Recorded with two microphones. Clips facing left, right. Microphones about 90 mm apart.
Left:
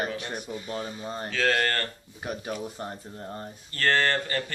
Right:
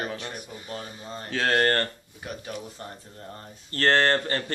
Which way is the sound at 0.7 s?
25° left (ahead or behind).